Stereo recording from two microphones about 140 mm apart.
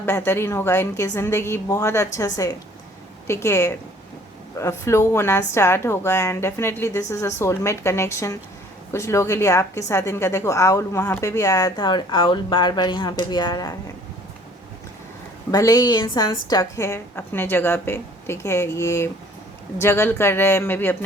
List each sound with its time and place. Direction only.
0.0 s a woman's voice: 15° left (ahead or behind)
15.5 s a woman's voice: 25° left (ahead or behind)